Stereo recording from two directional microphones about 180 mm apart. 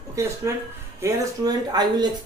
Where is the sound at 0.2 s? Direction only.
15° right (ahead or behind).